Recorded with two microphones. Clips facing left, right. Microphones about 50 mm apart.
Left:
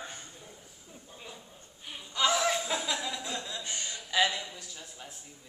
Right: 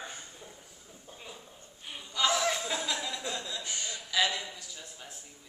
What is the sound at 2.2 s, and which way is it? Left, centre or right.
Chuckle, centre.